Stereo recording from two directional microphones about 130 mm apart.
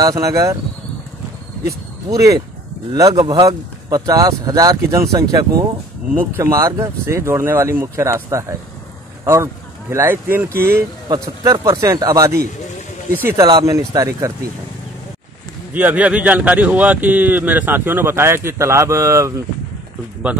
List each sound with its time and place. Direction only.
0.0 s speech: 25° right (ahead or behind)
1.7 s speech: 25° right (ahead or behind)
11.1 s speech: 30° right (ahead or behind)
13.5 s speech: 30° right (ahead or behind)
15.7 s speech: 10° right (ahead or behind)
20.3 s speech: 10° right (ahead or behind)